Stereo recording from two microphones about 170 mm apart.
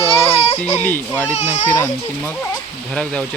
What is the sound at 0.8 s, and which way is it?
Speech, 10° left (ahead or behind).